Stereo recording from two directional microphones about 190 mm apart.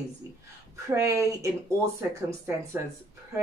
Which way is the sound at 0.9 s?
15° right (ahead or behind).